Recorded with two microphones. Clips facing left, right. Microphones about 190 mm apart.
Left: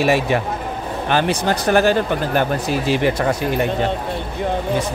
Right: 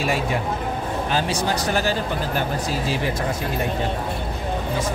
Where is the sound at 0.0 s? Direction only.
75° left (ahead or behind).